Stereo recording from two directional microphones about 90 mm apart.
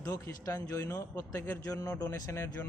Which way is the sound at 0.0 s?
40° left (ahead or behind).